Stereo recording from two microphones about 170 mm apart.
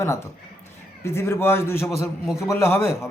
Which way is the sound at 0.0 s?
15° left (ahead or behind).